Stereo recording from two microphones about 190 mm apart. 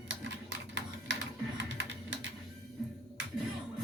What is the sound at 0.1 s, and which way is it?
Typewriter, 70° right (ahead or behind).